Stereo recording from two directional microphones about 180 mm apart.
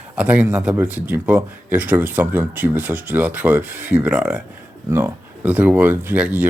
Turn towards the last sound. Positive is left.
turn(degrees=-10)  # may be behind; listen again after turning